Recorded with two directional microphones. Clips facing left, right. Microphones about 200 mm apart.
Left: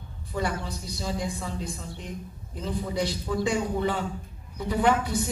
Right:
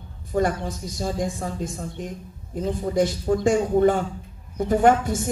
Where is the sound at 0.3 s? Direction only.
45° right (ahead or behind).